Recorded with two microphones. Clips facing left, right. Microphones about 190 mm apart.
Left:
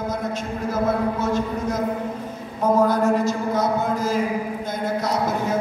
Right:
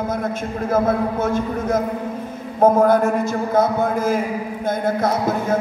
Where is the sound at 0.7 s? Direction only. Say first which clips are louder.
Right 4 dB; 55° right (ahead or behind).